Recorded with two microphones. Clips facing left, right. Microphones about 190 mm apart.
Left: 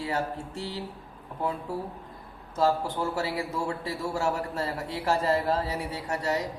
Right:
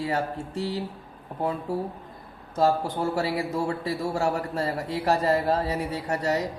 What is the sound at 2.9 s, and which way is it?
A woman's voice, 40° right (ahead or behind).